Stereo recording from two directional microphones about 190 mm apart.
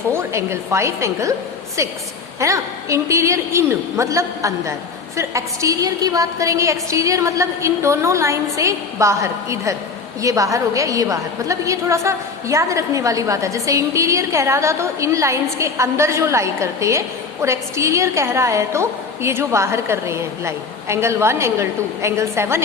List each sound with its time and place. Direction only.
0.1 s a woman's voice: 15° right (ahead or behind)
2.4 s a woman's voice: 15° right (ahead or behind)